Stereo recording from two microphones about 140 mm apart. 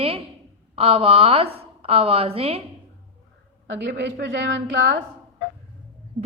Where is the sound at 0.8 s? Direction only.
45° right (ahead or behind).